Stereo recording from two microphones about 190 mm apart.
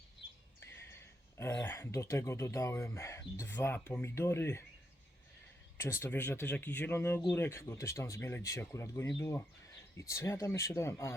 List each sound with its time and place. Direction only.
0.6 s speech: 15° left (ahead or behind)
5.7 s speech: 15° left (ahead or behind)